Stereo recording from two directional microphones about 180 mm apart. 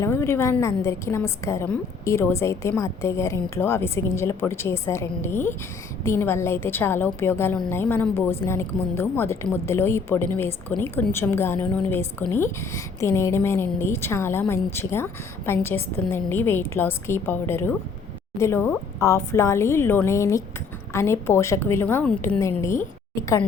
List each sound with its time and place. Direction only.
0.0 s a woman's voice: 15° left (ahead or behind)